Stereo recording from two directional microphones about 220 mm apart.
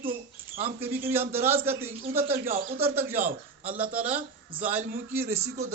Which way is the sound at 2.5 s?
30° right (ahead or behind).